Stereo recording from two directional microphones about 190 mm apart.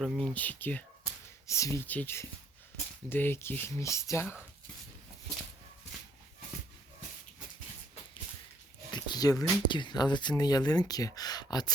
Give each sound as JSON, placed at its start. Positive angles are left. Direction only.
{"t": 0.0, "sound": "speech", "side_deg": 0}
{"t": 8.9, "sound": "speech", "side_deg": 20}